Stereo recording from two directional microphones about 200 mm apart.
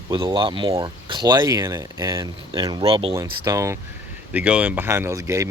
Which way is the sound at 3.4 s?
15° right (ahead or behind).